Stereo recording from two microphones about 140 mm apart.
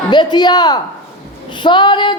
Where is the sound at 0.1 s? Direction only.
30° left (ahead or behind).